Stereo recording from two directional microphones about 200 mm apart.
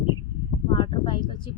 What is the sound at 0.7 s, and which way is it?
Speech, 25° left (ahead or behind).